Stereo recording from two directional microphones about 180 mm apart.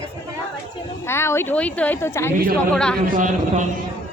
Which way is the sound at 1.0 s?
15° left (ahead or behind).